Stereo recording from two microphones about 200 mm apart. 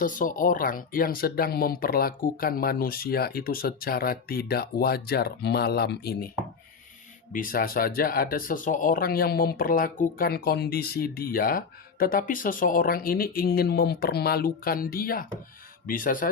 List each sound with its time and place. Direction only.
0.0 s speech: 40° left (ahead or behind)
7.3 s speech: 45° left (ahead or behind)